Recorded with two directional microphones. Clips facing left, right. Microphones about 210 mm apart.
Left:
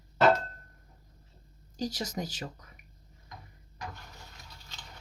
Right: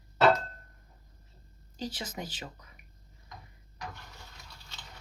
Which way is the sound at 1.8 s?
40° left (ahead or behind).